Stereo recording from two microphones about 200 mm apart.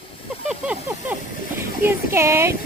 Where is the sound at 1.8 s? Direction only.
15° right (ahead or behind).